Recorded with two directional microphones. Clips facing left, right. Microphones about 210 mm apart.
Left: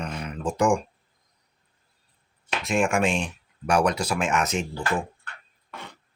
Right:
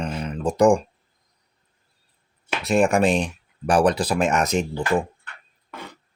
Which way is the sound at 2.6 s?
35° right (ahead or behind).